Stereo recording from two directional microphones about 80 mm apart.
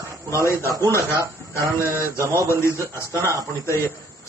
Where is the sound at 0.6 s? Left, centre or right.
Right.